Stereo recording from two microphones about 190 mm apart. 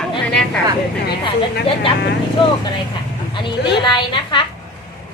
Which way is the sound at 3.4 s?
25° left (ahead or behind).